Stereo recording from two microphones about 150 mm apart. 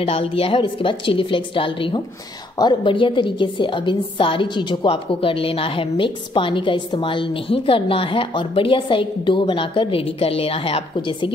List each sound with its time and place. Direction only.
0.0 s a woman's voice: 40° left (ahead or behind)